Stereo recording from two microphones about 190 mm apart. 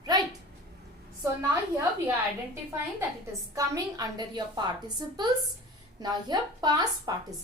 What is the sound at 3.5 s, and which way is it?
A woman's voice, 20° right (ahead or behind).